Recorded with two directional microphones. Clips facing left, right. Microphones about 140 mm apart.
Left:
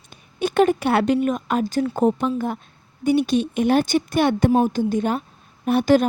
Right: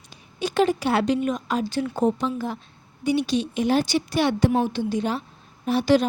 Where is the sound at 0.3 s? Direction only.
55° left (ahead or behind).